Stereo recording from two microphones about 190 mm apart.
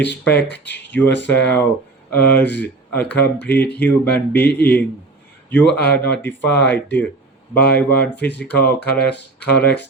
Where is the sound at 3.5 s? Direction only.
60° left (ahead or behind).